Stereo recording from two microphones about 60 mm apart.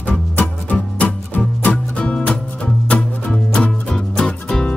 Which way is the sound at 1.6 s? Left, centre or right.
Centre.